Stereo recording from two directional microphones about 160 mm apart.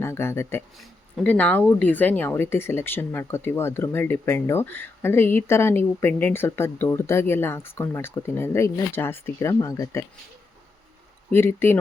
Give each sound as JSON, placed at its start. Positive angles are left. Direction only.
{"t": 0.0, "sound": "speech", "side_deg": 15}
{"t": 0.8, "sound": "speech", "side_deg": 5}
{"t": 11.3, "sound": "speech", "side_deg": 15}